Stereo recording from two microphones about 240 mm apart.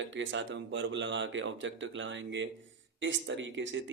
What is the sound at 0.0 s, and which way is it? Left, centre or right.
Speech, right.